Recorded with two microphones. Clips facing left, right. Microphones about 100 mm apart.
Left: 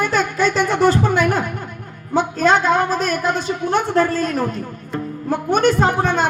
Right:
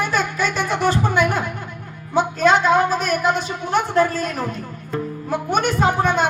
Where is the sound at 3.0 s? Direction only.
20° right (ahead or behind).